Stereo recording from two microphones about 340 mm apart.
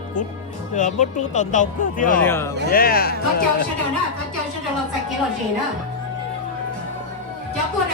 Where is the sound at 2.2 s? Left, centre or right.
Centre.